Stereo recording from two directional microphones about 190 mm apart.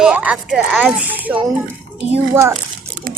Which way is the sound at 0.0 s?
5° right (ahead or behind).